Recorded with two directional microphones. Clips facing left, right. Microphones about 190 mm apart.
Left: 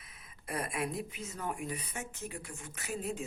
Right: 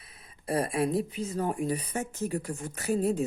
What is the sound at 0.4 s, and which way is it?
Speech, 35° right (ahead or behind).